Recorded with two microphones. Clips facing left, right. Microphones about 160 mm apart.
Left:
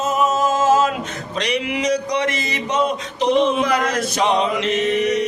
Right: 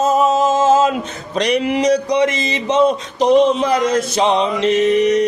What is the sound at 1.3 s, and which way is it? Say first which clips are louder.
Music: right 6 dB; 45° right (ahead or behind).